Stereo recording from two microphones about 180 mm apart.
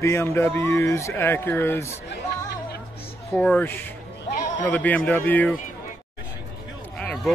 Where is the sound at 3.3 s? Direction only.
10° left (ahead or behind).